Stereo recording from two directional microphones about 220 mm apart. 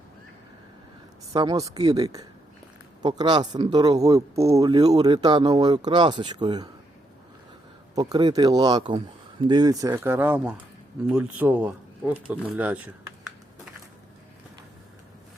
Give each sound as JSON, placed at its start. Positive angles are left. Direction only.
{"t": 1.3, "sound": "speech", "side_deg": -20}
{"t": 7.9, "sound": "speech", "side_deg": -20}